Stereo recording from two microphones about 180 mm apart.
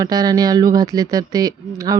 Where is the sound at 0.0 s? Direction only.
20° right (ahead or behind).